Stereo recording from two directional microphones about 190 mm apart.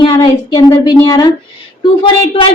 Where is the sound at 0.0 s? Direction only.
25° left (ahead or behind).